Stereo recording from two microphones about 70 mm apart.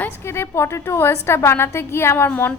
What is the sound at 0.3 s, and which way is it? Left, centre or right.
A woman's voice, left.